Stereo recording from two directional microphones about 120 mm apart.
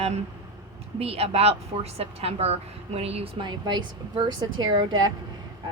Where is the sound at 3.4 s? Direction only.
40° right (ahead or behind).